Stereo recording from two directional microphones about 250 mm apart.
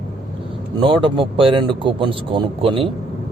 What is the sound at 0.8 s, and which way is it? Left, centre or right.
A man's voice, centre.